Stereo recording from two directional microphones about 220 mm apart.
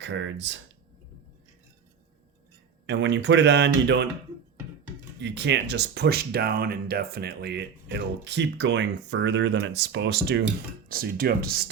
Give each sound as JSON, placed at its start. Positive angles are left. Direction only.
{"t": 0.0, "sound": "speech", "side_deg": -55}
{"t": 2.8, "sound": "speech", "side_deg": -55}
{"t": 5.2, "sound": "speech", "side_deg": -50}